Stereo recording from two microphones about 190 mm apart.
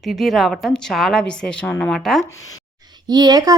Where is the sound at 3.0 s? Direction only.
20° right (ahead or behind).